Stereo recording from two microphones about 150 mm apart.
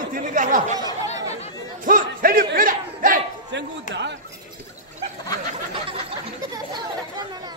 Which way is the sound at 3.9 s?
55° left (ahead or behind).